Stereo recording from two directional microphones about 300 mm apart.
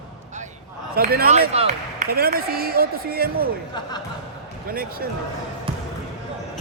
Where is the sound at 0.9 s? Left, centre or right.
Right.